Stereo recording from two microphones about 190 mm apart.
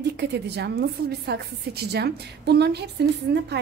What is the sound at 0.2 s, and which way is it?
A woman's voice, 60° right (ahead or behind).